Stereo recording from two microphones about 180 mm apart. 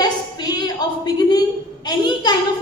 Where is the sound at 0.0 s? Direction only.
20° left (ahead or behind).